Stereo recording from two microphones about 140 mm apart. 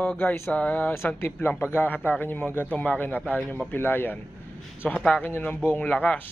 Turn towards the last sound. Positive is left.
turn(degrees=10)  # may be behind; listen again after turning